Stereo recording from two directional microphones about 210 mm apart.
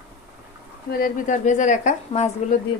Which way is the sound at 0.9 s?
45° left (ahead or behind).